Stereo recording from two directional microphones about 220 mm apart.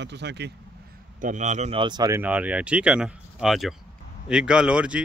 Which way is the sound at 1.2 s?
35° right (ahead or behind).